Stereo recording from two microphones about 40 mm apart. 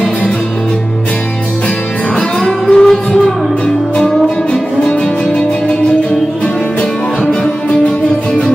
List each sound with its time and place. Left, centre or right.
2.7 s music: centre
3.9 s music: left